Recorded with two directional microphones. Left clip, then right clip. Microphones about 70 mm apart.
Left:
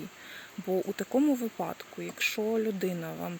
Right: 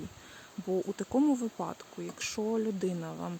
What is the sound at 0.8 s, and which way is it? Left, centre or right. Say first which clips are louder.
Speech: left 2 dB; right.